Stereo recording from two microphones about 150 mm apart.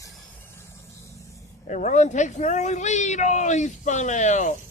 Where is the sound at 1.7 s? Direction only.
55° left (ahead or behind).